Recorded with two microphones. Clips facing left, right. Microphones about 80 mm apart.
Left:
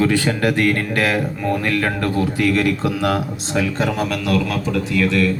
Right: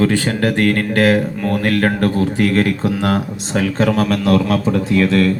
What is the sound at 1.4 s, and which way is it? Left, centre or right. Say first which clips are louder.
A man's voice: right 3 dB; right.